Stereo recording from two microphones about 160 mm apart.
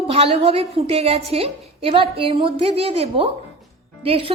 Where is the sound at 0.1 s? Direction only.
40° right (ahead or behind).